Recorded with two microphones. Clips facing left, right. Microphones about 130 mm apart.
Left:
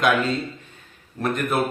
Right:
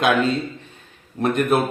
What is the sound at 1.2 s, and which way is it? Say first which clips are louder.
Speech: right 4 dB; 25° right (ahead or behind).